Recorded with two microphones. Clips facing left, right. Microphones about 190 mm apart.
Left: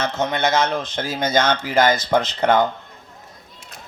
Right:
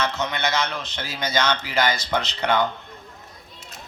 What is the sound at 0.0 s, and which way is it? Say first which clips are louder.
Speech: left 4 dB; 50° left (ahead or behind).